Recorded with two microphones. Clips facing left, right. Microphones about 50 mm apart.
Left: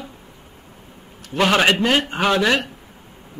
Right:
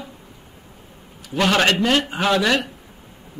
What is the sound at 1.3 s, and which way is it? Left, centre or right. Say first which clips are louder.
Speech: left 1 dB; centre.